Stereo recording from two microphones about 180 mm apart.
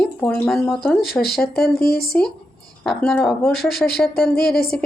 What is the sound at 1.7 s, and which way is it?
Speech, 55° left (ahead or behind).